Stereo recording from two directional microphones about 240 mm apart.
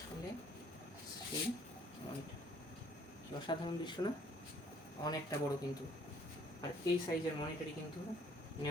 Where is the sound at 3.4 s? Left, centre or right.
Centre.